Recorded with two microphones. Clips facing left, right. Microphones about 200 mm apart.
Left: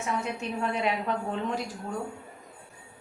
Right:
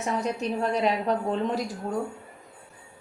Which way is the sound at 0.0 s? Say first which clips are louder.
Right 4 dB; 40° right (ahead or behind).